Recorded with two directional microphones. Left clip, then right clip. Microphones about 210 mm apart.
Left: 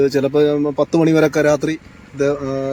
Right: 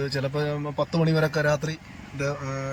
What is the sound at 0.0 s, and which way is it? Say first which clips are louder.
Speech: left 13 dB; 65° left (ahead or behind).